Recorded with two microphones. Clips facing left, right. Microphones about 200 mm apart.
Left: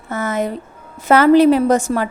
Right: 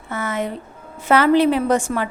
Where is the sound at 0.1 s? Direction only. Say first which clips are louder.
Left 4 dB; 40° left (ahead or behind).